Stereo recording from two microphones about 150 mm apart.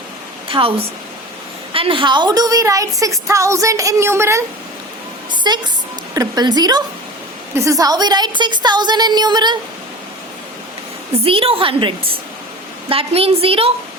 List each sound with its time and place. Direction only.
0.4 s speech: 35° right (ahead or behind)
1.7 s a woman's voice: 35° right (ahead or behind); by 4.4 s 15° right (ahead or behind)
5.3 s a sound: 30° right (ahead or behind)
6.1 s a woman's voice: 25° right (ahead or behind)
11.1 s a woman's voice: 40° right (ahead or behind)